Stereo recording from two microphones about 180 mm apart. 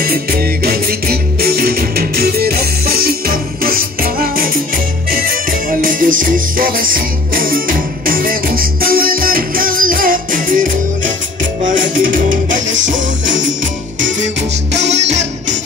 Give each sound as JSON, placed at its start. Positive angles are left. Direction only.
{"t": 0.0, "sound": "music", "side_deg": -55}